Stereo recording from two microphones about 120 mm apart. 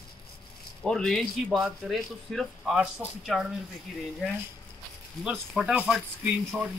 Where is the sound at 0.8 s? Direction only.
5° left (ahead or behind).